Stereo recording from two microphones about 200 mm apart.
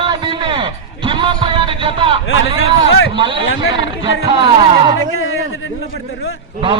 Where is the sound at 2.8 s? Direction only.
70° left (ahead or behind).